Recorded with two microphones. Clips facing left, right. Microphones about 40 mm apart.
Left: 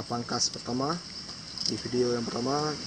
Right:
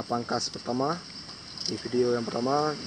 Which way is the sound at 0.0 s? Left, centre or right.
Centre.